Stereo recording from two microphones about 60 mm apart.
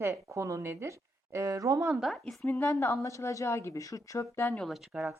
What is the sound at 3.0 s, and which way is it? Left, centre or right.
A woman's voice, left.